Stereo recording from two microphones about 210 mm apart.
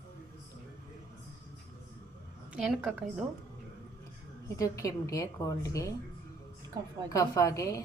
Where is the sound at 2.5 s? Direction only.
Centre (ahead or behind).